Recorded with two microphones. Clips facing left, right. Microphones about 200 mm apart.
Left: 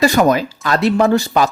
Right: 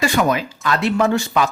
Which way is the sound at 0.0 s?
40° left (ahead or behind).